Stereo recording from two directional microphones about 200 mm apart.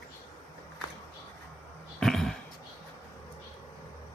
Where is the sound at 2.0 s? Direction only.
Centre (ahead or behind).